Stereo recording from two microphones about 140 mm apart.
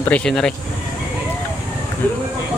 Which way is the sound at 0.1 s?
5° left (ahead or behind).